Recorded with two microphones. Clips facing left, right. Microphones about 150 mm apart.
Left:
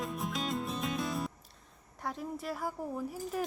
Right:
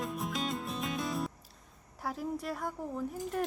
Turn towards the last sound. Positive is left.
turn(degrees=5)  # may be behind; listen again after turning